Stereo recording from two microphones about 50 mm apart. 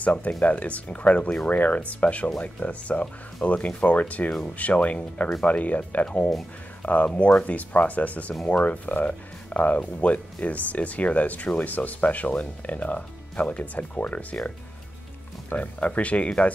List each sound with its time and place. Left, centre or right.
0.0 s speech: left
6.8 s a sound: left
7.4 s speech: left
15.5 s speech: left